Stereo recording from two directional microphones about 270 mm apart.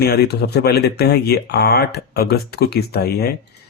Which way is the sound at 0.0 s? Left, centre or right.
Left.